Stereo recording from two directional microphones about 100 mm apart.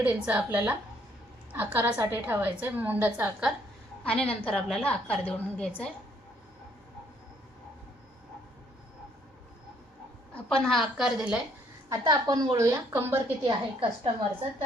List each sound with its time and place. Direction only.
0.0 s a woman's voice: 15° right (ahead or behind)
4.0 s a woman's voice: 10° left (ahead or behind)
10.3 s a woman's voice: 5° left (ahead or behind)
11.9 s a woman's voice: 40° right (ahead or behind); by 13.3 s 20° right (ahead or behind)
13.4 s a woman's voice: 50° right (ahead or behind)